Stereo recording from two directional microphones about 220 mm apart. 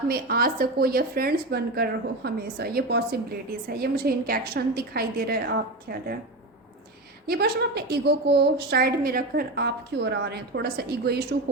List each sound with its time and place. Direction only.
0.1 s a woman's voice: 40° right (ahead or behind)
7.3 s a woman's voice: 45° right (ahead or behind)